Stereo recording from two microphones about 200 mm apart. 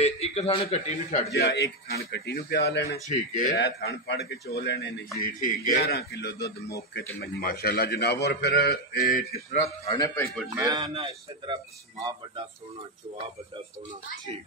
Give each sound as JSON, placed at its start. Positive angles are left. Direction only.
{"t": 0.0, "sound": "a man's voice", "side_deg": 30}
{"t": 1.3, "sound": "a man's voice", "side_deg": 55}
{"t": 3.1, "sound": "a man's voice", "side_deg": 40}
{"t": 3.5, "sound": "a man's voice", "side_deg": 60}
{"t": 5.2, "sound": "a man's voice", "side_deg": 45}
{"t": 9.9, "sound": "speech", "side_deg": 15}
{"t": 10.5, "sound": "a man's voice", "side_deg": -20}